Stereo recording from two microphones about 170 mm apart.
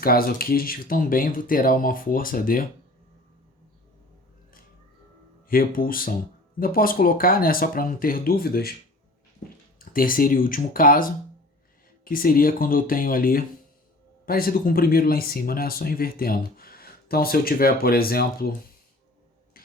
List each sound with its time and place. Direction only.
0.0 s speech: 60° left (ahead or behind)
5.5 s speech: 55° left (ahead or behind)
9.7 s speech: 55° left (ahead or behind)